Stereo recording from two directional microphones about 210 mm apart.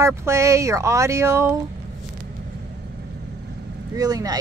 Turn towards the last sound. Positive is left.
turn(degrees=-20)  # may be behind; listen again after turning